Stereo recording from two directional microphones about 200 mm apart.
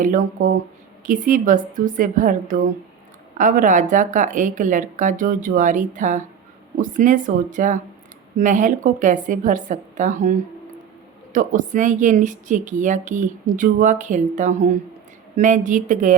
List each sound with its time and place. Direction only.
0.0 s speech: 40° right (ahead or behind)